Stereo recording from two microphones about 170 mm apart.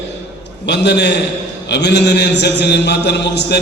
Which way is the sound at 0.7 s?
85° left.